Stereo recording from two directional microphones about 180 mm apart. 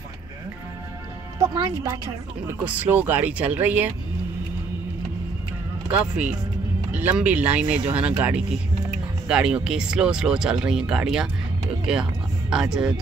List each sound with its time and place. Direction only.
1.4 s a woman's voice: 20° right (ahead or behind)
2.6 s speech: 10° right (ahead or behind)
5.9 s speech: 10° right (ahead or behind)